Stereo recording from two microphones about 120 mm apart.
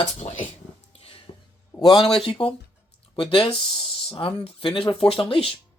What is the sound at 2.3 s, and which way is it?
Speech, 50° left (ahead or behind).